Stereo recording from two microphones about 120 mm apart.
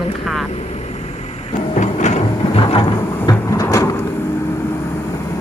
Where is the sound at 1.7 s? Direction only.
80° left.